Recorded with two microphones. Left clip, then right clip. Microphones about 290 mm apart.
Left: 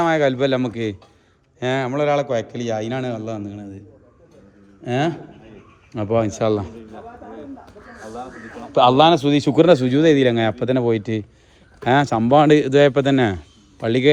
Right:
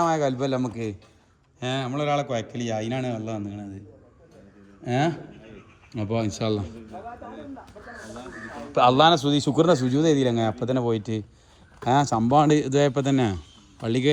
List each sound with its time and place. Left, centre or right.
0.0 s speech: left
1.9 s a man's voice: centre
4.8 s a man's voice: centre
6.0 s a man's voice: left
6.2 s a man's voice: centre
8.7 s a man's voice: left